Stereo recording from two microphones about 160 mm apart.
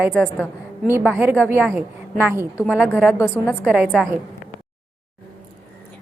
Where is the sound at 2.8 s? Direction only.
5° left (ahead or behind).